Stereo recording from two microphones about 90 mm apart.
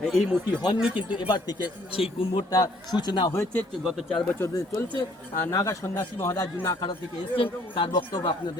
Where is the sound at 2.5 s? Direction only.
45° left (ahead or behind).